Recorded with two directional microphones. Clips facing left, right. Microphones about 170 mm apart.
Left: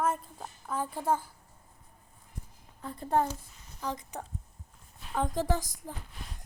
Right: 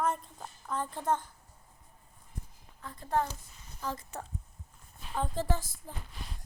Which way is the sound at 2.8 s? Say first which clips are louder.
Left 3 dB; 30° left (ahead or behind).